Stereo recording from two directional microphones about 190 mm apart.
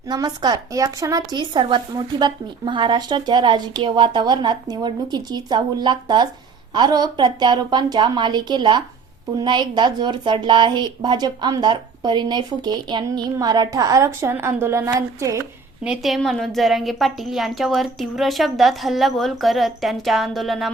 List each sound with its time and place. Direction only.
0.1 s a woman's voice: 20° right (ahead or behind)
15.8 s a woman's voice: centre (ahead or behind)